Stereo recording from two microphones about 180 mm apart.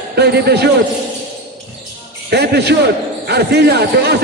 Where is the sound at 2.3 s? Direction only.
65° right (ahead or behind).